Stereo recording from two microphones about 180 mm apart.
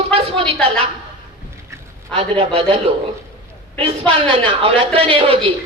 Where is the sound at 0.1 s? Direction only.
30° right (ahead or behind).